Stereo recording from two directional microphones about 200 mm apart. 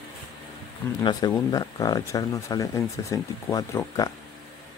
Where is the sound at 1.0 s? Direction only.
20° left (ahead or behind).